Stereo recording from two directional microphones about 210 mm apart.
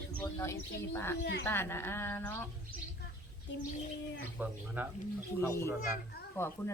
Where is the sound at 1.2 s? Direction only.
55° left (ahead or behind).